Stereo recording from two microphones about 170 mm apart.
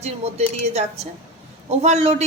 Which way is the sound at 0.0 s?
40° right (ahead or behind).